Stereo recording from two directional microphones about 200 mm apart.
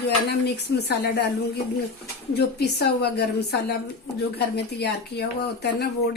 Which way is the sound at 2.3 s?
55° left (ahead or behind).